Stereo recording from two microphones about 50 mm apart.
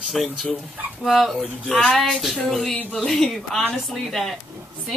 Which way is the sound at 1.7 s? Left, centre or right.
Centre.